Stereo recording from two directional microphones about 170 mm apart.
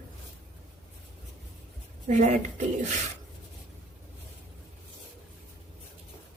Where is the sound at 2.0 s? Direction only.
40° right (ahead or behind).